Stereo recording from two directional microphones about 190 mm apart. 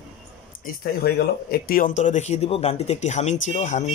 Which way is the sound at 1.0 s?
55° left (ahead or behind).